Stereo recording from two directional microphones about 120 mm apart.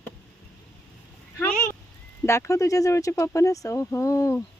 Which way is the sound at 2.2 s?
20° left (ahead or behind).